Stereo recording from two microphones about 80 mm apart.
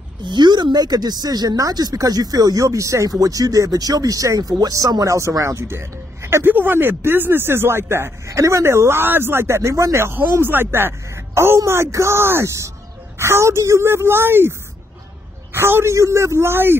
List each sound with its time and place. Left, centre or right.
0.2 s speech: right
15.5 s speech: right